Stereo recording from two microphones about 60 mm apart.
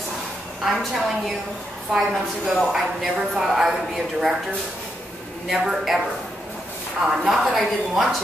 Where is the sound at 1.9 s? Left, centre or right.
Centre.